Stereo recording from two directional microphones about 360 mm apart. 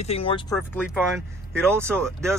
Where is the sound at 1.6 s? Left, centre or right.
Centre.